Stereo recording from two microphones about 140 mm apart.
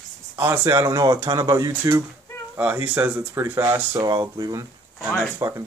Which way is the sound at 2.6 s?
10° right (ahead or behind).